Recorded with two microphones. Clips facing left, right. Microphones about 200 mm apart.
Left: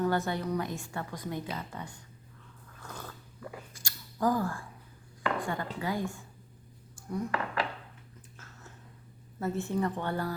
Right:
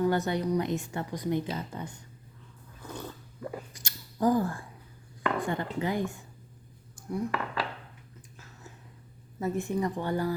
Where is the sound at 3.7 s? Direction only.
20° right (ahead or behind).